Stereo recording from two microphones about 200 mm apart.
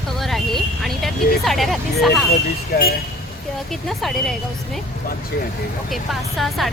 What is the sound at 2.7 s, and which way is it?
Speech, 50° left (ahead or behind).